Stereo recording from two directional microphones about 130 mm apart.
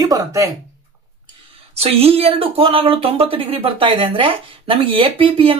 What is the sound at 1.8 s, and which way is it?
Speech, 50° right (ahead or behind).